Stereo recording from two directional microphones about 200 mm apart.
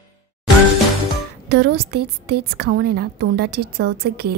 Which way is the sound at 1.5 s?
55° right (ahead or behind).